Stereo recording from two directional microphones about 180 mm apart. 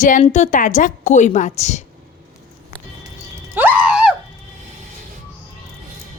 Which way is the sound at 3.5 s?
10° right (ahead or behind).